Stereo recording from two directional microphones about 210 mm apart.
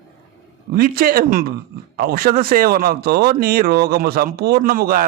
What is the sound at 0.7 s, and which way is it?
Speech, 45° right (ahead or behind).